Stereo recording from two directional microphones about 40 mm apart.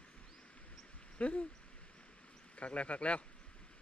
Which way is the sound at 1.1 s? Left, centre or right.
Left.